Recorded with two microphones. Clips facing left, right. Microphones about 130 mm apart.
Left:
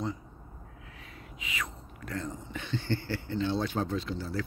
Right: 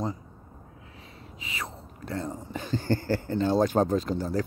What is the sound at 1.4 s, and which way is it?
Speech, 30° right (ahead or behind).